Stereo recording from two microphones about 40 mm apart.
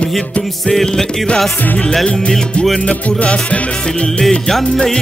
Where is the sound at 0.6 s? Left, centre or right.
Centre.